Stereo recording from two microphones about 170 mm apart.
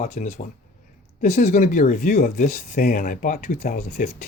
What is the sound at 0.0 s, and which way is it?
Speech, 45° left (ahead or behind).